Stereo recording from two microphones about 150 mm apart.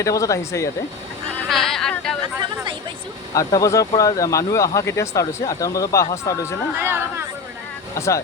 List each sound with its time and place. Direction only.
0.0 s speech: 20° left (ahead or behind)
1.5 s a sound: centre (ahead or behind)
3.3 s speech: 20° left (ahead or behind)
6.7 s speech: 15° right (ahead or behind)
7.9 s speech: 20° left (ahead or behind)